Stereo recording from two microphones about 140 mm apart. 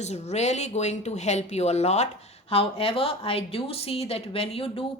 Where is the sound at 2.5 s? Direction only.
40° left (ahead or behind).